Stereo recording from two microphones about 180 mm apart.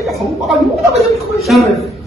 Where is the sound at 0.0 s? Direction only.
Centre (ahead or behind).